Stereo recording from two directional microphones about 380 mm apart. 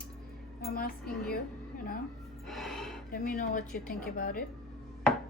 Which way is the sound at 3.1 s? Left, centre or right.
Left.